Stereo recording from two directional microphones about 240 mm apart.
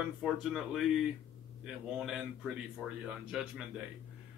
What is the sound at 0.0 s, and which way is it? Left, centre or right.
Speech, centre.